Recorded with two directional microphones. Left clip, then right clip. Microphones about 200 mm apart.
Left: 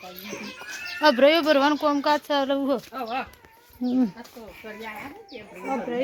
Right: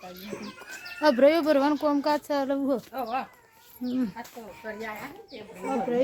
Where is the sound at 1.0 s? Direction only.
10° right (ahead or behind).